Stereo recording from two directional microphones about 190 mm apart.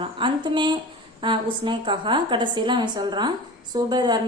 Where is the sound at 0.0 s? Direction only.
25° right (ahead or behind).